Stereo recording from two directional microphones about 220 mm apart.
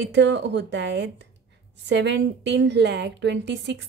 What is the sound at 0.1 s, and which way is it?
A woman's voice, 50° right (ahead or behind).